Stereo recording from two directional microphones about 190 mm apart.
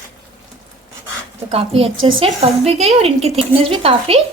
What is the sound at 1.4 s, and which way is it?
A woman's voice, 30° right (ahead or behind).